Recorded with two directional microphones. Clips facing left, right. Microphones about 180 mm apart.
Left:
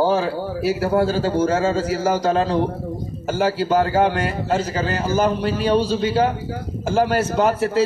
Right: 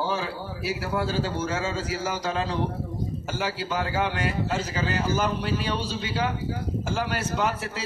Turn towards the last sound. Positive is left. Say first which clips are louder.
# left 9 dB
turn(degrees=45)  # may be behind; listen again after turning